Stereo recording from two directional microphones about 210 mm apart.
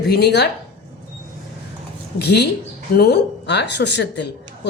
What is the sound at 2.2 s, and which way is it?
A woman's voice, 50° left (ahead or behind).